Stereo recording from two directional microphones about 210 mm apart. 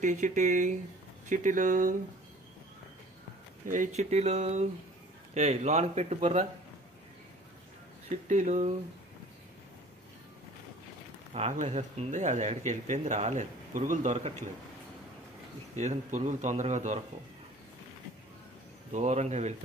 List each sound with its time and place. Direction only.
0.0 s speech: 35° right (ahead or behind)
3.6 s speech: 35° right (ahead or behind)
8.1 s speech: 35° right (ahead or behind)
11.3 s speech: 35° right (ahead or behind)
15.7 s speech: 35° right (ahead or behind)
18.9 s speech: 35° right (ahead or behind)